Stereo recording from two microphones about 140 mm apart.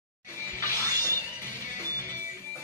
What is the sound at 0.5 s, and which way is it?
Music, 20° left (ahead or behind).